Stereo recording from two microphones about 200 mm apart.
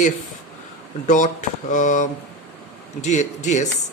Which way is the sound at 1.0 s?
40° left (ahead or behind).